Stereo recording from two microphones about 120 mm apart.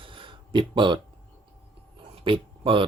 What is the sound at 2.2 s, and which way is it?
Speech, 45° right (ahead or behind).